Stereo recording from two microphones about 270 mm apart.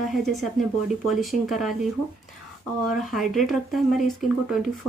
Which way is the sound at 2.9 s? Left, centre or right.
Centre.